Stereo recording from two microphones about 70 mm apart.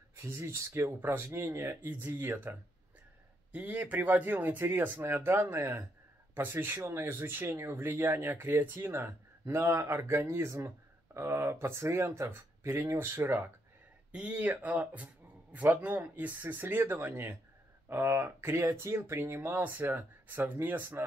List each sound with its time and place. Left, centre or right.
0.1 s speech: right
3.5 s speech: right
6.3 s speech: right
14.1 s speech: centre